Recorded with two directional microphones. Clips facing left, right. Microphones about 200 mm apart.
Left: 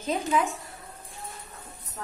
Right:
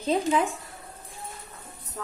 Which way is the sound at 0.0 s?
30° right (ahead or behind).